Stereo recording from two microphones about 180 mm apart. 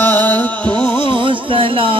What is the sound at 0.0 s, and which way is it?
Music, 10° left (ahead or behind).